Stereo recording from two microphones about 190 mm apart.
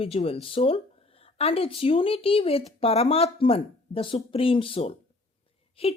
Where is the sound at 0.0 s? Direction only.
30° left (ahead or behind).